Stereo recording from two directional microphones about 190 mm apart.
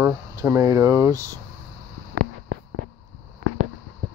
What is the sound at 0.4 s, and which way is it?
Speech, 15° right (ahead or behind).